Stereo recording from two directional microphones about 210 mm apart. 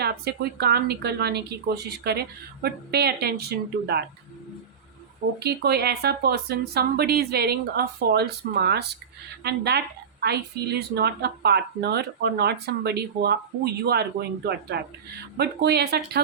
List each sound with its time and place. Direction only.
0.0 s a woman's voice: 50° right (ahead or behind)
5.4 s a woman's voice: 50° right (ahead or behind)